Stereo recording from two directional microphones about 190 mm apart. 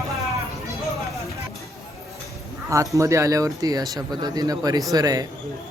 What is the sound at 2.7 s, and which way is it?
Speech, 15° right (ahead or behind).